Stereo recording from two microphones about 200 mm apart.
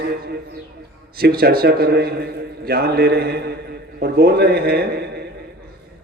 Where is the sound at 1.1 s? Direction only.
50° right (ahead or behind).